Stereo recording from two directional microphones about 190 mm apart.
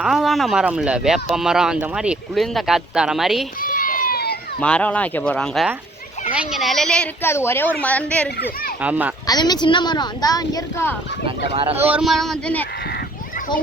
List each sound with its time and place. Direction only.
0.0 s speech: centre (ahead or behind)
3.6 s run: 45° left (ahead or behind)
4.6 s a woman's voice: 5° left (ahead or behind)
8.8 s a child's voice: 10° right (ahead or behind)
9.2 s a woman's voice: 20° left (ahead or behind)
11.5 s speech: 30° right (ahead or behind)
11.8 s speech: 5° right (ahead or behind)